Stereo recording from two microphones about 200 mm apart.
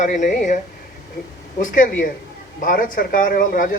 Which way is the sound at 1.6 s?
40° left (ahead or behind).